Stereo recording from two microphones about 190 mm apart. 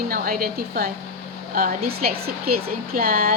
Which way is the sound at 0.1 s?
50° right (ahead or behind).